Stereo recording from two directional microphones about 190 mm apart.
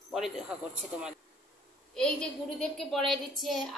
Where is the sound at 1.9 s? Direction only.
5° left (ahead or behind).